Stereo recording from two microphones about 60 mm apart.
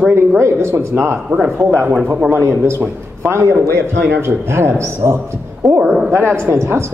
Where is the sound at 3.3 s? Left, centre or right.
Right.